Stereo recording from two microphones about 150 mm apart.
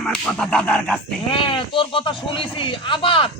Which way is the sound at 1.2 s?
35° left (ahead or behind).